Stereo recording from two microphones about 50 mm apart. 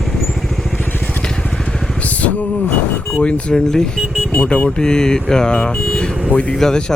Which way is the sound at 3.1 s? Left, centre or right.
Left.